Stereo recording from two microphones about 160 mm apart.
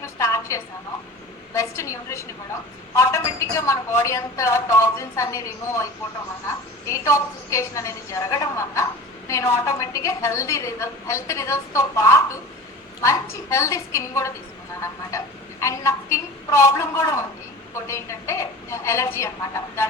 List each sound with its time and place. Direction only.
0.0 s a sound: 20° left (ahead or behind)
1.5 s a woman's voice: 20° left (ahead or behind)
15.6 s a woman's voice: 20° left (ahead or behind)